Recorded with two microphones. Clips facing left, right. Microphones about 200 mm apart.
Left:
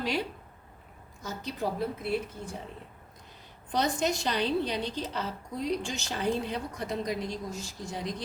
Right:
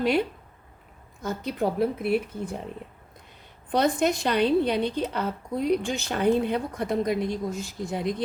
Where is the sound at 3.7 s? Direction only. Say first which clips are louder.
Right 6 dB; 55° right (ahead or behind).